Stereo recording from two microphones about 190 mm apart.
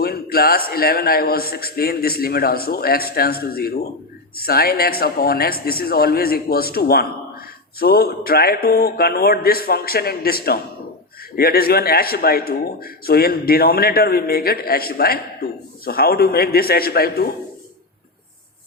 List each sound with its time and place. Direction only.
0.0 s speech: 55° left (ahead or behind)